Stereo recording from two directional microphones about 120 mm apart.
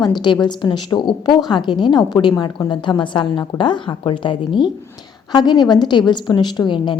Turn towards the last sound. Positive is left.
turn(degrees=40)  # may be behind; listen again after turning